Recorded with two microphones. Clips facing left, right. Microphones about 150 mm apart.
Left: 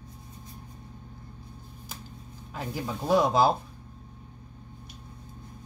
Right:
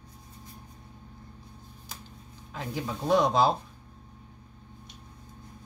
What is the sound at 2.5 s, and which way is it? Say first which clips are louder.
Speech: even; 5° left (ahead or behind).